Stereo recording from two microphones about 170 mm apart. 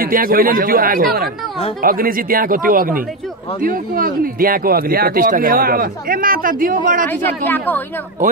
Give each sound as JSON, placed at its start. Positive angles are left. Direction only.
{"t": 0.0, "sound": "speech", "side_deg": -55}
{"t": 7.2, "sound": "speech", "side_deg": 10}